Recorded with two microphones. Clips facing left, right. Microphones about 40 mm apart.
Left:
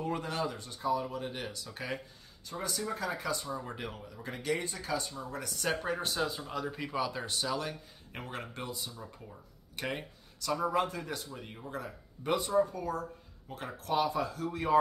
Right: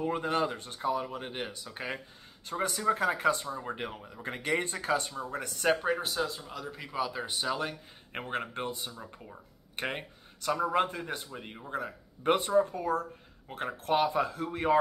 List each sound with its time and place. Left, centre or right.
0.0 s speech: centre
0.3 s speech: right
2.4 s speech: right
3.4 s speech: right
5.1 s speech: right
5.8 s speech: centre; by 9.0 s right
9.8 s a sound: right
10.7 s speech: right
12.2 s speech: right